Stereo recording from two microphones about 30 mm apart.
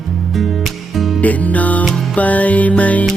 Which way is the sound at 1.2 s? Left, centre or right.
Left.